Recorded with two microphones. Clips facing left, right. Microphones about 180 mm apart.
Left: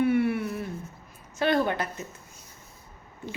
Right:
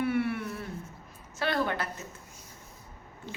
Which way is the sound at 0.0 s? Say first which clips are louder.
Left 5 dB; 20° left (ahead or behind).